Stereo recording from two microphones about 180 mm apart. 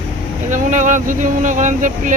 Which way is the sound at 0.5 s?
45° right (ahead or behind).